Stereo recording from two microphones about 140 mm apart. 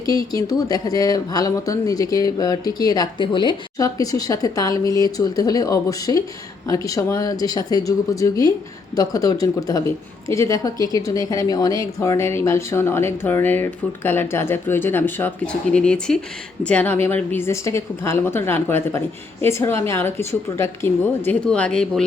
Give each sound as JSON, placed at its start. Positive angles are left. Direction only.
{"t": 0.0, "sound": "a woman's voice", "side_deg": 25}